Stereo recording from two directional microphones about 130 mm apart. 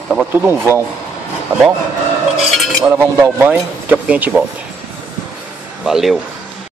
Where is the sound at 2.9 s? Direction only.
15° right (ahead or behind).